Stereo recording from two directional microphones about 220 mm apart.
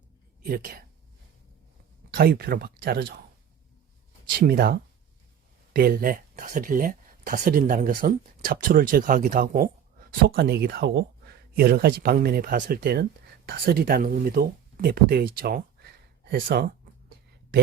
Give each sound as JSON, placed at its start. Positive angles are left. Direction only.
{"t": 0.4, "sound": "speech", "side_deg": -40}
{"t": 2.0, "sound": "speech", "side_deg": -45}
{"t": 4.4, "sound": "speech", "side_deg": -45}